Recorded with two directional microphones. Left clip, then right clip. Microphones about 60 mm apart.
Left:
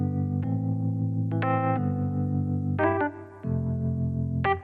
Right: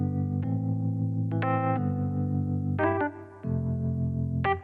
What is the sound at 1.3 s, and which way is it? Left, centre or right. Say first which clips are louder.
Music: left 2 dB; centre.